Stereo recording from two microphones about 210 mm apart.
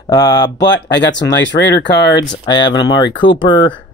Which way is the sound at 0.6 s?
55° left (ahead or behind).